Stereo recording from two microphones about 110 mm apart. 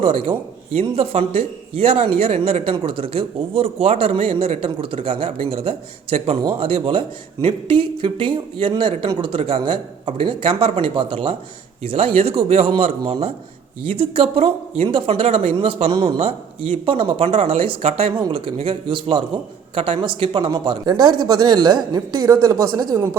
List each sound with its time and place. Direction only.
0.0 s a man's voice: 55° right (ahead or behind); by 23.0 s 30° right (ahead or behind)